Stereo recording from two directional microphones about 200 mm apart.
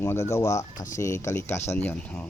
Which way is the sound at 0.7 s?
40° left (ahead or behind).